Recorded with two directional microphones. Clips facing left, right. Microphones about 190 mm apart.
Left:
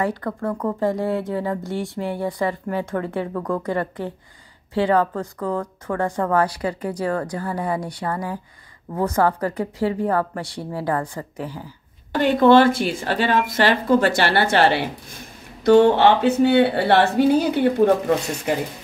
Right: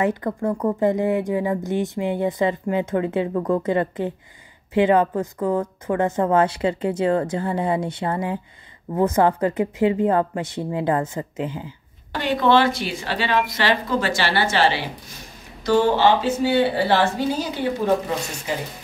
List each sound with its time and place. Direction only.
0.0 s speech: 20° right (ahead or behind)
12.2 s a woman's voice: 50° left (ahead or behind)